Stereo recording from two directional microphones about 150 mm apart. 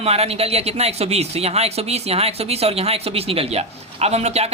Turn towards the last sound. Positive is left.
turn(degrees=-45)  # may be behind; listen again after turning